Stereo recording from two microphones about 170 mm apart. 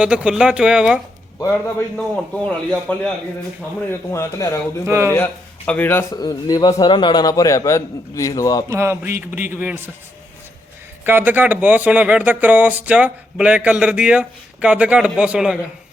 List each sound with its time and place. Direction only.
0.0 s speech: 5° right (ahead or behind)
1.4 s a man's voice: 15° left (ahead or behind)
4.1 s a man's voice: 15° left (ahead or behind)
4.9 s speech: 15° right (ahead or behind)
5.1 s a man's voice: 10° left (ahead or behind)
8.7 s speech: 15° right (ahead or behind)
11.0 s speech: 10° right (ahead or behind)